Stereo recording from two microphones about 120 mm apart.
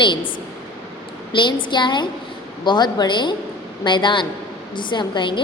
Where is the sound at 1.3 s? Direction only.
40° left (ahead or behind).